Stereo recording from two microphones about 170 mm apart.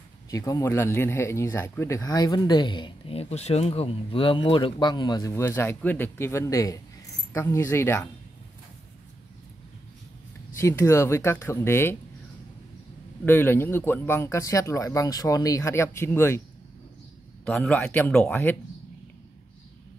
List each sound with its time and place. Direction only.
0.3 s speech: 20° left (ahead or behind)
10.6 s speech: 15° left (ahead or behind)
13.2 s speech: 10° left (ahead or behind)
17.5 s speech: 5° left (ahead or behind)